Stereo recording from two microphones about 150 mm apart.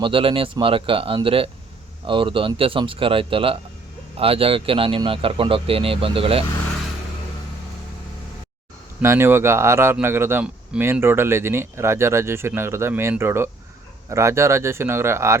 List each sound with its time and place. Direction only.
0.0 s speech: 35° right (ahead or behind)
9.0 s speech: 15° right (ahead or behind)